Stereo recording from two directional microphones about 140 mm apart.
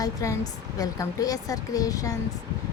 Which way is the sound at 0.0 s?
25° left (ahead or behind).